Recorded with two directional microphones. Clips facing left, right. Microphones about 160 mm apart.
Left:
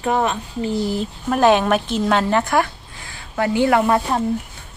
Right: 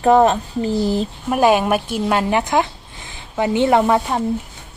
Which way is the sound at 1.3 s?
10° right (ahead or behind).